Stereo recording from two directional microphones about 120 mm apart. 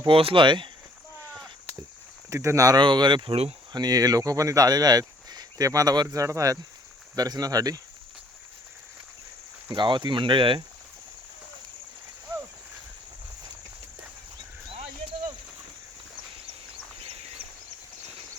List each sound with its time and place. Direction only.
0.1 s speech: 50° right (ahead or behind)
2.3 s speech: 25° right (ahead or behind)
2.8 s speech: 40° right (ahead or behind)
9.7 s speech: 40° right (ahead or behind)
17.0 s a sound: 50° right (ahead or behind)